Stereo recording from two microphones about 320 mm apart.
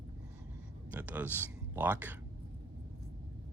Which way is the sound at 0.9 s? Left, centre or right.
Centre.